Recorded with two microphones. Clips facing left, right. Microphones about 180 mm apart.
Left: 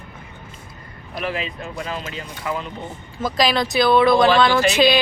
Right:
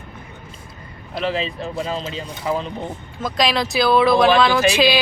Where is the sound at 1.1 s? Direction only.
30° right (ahead or behind).